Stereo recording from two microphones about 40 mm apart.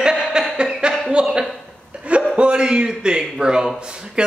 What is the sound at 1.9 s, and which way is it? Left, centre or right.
Chuckle, right.